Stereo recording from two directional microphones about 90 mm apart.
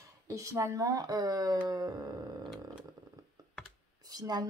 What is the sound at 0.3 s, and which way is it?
Speech, 35° right (ahead or behind).